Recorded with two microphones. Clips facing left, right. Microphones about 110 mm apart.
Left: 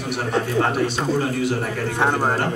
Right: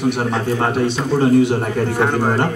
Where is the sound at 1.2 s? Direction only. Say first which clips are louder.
Right 14 dB; 25° right (ahead or behind).